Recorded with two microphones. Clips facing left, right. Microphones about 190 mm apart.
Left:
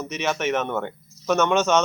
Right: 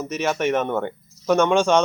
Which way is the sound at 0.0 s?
10° right (ahead or behind).